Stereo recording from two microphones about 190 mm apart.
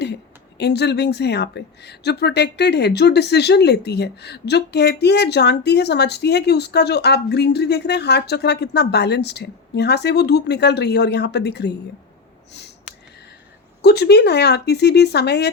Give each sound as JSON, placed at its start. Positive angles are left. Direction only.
{"t": 0.6, "sound": "a woman's voice", "side_deg": 60}
{"t": 12.5, "sound": "snort", "side_deg": 65}
{"t": 13.8, "sound": "a woman's voice", "side_deg": 60}